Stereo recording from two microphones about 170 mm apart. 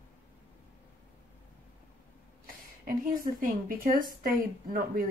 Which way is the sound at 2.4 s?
55° right (ahead or behind).